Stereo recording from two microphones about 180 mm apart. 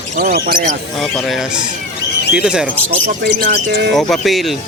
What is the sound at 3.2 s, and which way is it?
Speech, 60° right (ahead or behind).